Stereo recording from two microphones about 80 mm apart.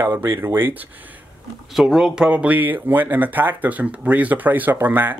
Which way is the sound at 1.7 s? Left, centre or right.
Centre.